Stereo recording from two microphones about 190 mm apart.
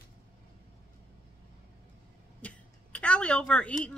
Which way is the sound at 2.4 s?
5° left (ahead or behind).